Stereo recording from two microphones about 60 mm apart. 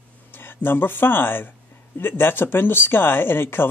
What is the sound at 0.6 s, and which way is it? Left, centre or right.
Speech, left.